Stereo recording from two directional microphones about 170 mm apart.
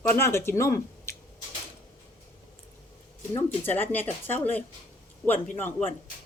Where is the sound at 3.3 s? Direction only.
10° left (ahead or behind).